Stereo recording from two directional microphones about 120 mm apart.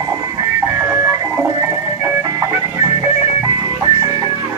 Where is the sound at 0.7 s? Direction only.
20° right (ahead or behind).